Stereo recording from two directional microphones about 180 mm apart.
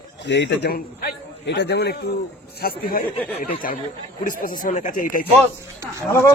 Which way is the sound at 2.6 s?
55° left (ahead or behind).